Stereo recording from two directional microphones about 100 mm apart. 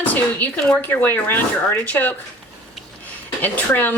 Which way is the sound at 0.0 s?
15° left (ahead or behind).